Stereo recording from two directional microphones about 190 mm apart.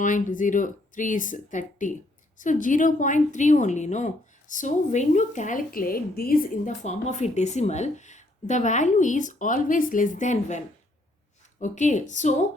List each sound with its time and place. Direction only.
0.0 s a woman's voice: 45° left (ahead or behind)
11.6 s a woman's voice: 40° left (ahead or behind)